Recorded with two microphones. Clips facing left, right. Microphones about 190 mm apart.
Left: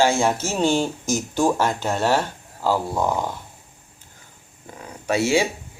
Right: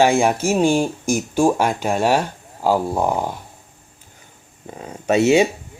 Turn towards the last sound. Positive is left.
turn(degrees=-20)  # may be behind; listen again after turning